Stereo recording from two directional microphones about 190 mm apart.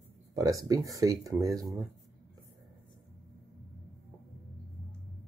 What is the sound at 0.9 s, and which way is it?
Speech, 15° right (ahead or behind).